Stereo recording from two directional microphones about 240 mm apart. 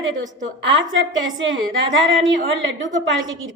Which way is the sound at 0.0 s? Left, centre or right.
Right.